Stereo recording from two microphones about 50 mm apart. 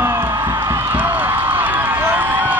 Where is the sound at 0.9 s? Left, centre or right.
Right.